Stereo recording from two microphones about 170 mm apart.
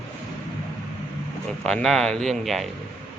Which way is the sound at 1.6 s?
5° left (ahead or behind).